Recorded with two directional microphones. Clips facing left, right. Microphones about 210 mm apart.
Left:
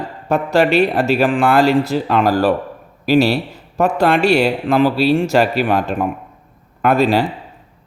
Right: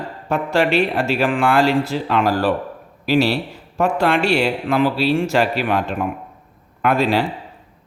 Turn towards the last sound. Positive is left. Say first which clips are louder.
# left 3 dB
turn(degrees=40)  # may be behind; listen again after turning